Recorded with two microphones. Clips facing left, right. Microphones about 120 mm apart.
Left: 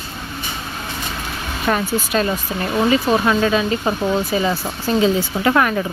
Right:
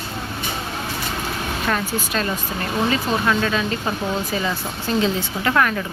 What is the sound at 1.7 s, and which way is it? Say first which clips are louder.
Speech: left 4 dB; 20° left (ahead or behind).